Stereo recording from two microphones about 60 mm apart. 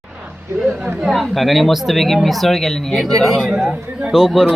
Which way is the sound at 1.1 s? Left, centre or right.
Centre.